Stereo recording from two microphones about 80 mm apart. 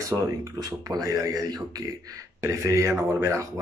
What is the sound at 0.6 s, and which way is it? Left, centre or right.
Speech, right.